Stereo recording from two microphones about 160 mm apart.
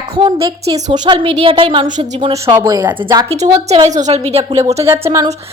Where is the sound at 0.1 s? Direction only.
30° right (ahead or behind).